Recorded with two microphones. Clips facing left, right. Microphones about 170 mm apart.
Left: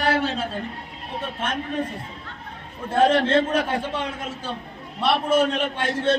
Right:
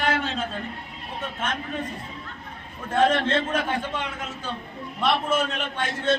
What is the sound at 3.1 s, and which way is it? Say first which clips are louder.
Speech: left 4 dB; 35° left (ahead or behind).